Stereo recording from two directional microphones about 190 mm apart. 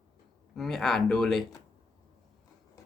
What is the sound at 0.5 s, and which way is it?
Speech, centre (ahead or behind).